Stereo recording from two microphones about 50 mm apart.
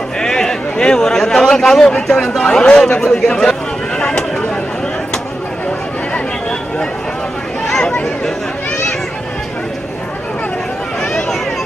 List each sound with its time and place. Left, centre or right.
0.2 s a sound: centre
1.7 s a man's voice: centre
2.4 s a man's voice: centre
3.0 s a man's voice: centre
7.6 s chatter: centre